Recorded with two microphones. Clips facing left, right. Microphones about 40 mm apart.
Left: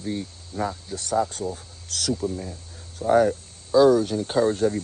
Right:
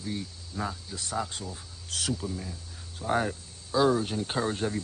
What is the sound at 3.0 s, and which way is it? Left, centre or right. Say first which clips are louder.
Speech: left 9 dB; right.